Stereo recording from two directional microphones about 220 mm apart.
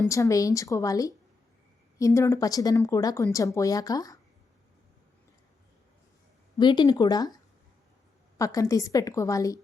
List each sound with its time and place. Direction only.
0.1 s a woman's voice: 15° left (ahead or behind)
6.6 s speech: 20° left (ahead or behind)
8.4 s a woman's voice: 15° left (ahead or behind)